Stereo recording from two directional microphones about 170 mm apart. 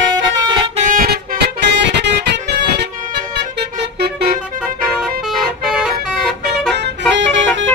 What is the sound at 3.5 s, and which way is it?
Vehicle horn, 65° right (ahead or behind).